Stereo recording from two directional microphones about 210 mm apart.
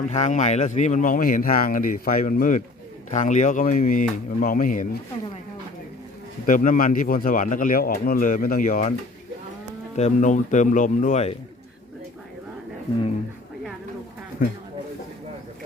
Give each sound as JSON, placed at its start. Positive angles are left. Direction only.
{"t": 0.1, "sound": "speech", "side_deg": 35}
{"t": 6.4, "sound": "speech", "side_deg": 40}
{"t": 9.9, "sound": "speech", "side_deg": 35}
{"t": 14.4, "sound": "speech", "side_deg": 40}